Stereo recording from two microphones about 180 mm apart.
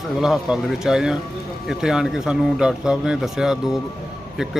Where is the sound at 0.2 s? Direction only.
Centre (ahead or behind).